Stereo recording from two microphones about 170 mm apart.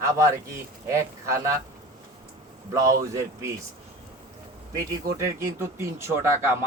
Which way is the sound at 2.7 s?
20° right (ahead or behind).